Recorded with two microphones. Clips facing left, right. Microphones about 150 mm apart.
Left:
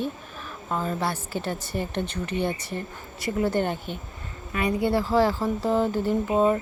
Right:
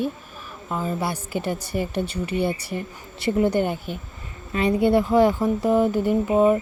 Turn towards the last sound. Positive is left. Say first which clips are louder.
# right 4 dB
turn(degrees=-10)  # may be behind; listen again after turning